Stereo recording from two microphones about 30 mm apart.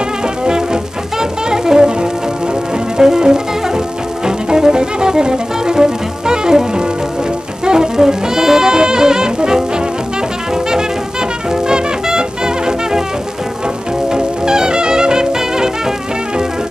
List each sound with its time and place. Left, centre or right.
1.1 s music: centre
14.0 s music: right